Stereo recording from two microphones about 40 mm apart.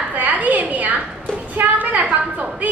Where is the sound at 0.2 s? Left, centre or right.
Right.